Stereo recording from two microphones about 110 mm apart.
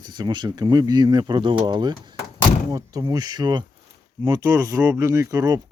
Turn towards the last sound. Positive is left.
turn(degrees=-30)  # may be behind; listen again after turning